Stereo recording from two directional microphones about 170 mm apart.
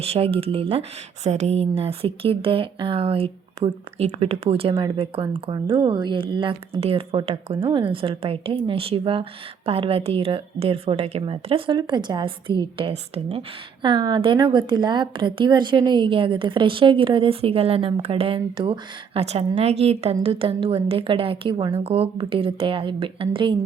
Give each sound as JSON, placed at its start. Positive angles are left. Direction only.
{"t": 0.0, "sound": "speech", "side_deg": -35}